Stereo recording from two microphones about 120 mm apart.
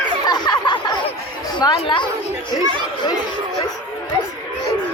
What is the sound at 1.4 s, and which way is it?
Chatter, 35° left (ahead or behind).